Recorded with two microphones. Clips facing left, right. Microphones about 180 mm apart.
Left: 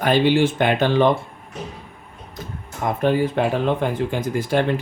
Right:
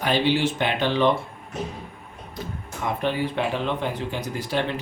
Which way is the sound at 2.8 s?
45° left (ahead or behind).